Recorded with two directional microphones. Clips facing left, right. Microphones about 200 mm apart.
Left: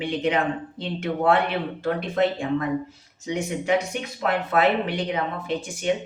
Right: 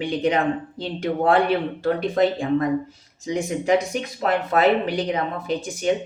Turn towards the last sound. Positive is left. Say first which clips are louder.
# right 3 dB
turn(degrees=-35)  # may be behind; listen again after turning